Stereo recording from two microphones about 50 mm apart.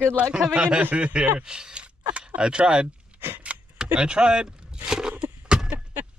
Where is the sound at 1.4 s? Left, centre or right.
Centre.